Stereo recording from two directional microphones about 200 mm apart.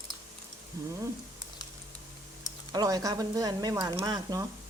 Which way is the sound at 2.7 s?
20° right (ahead or behind).